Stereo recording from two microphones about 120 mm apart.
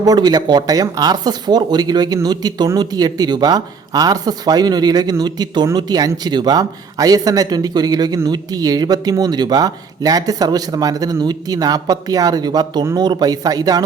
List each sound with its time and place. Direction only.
0.0 s speech: 35° right (ahead or behind)